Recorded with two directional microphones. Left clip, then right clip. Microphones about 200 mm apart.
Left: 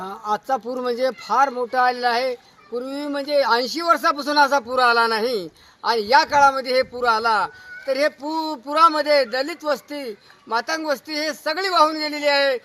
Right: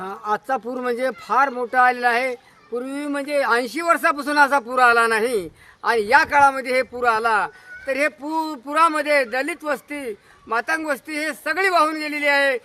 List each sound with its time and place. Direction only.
0.0 s speech: 15° right (ahead or behind)